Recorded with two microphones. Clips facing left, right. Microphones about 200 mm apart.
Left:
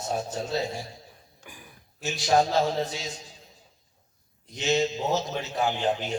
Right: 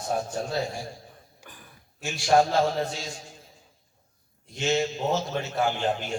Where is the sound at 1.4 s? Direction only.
10° left (ahead or behind).